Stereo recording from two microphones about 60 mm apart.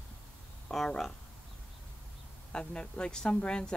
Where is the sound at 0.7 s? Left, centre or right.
Centre.